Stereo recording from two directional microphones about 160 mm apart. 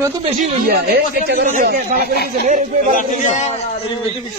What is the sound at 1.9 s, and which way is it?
Speech, 75° left (ahead or behind).